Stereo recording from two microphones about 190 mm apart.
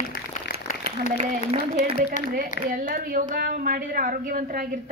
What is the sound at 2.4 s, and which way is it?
A woman's voice, 45° right (ahead or behind).